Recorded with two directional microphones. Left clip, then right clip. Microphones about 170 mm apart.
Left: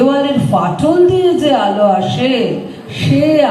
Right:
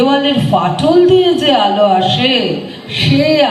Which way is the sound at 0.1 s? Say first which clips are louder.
Right 1 dB; 40° right (ahead or behind).